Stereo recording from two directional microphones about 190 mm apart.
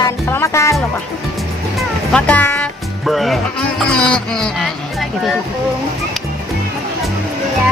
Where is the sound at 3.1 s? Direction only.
Centre (ahead or behind).